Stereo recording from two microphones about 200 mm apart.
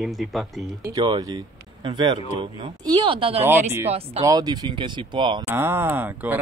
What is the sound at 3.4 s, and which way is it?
Speech, 10° right (ahead or behind).